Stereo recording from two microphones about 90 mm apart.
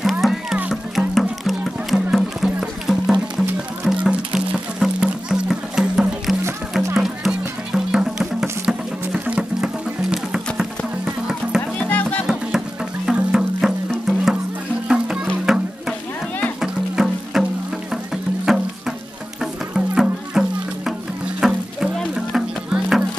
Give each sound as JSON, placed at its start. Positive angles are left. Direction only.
{"t": 0.2, "sound": "music", "side_deg": -5}
{"t": 11.8, "sound": "music", "side_deg": 15}
{"t": 12.3, "sound": "music", "side_deg": -5}
{"t": 15.5, "sound": "music", "side_deg": -5}